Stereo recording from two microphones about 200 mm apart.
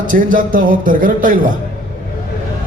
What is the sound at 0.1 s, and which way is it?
Speech, 45° right (ahead or behind).